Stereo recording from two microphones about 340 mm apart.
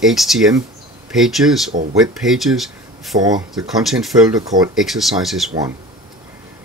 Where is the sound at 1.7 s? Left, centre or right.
Centre.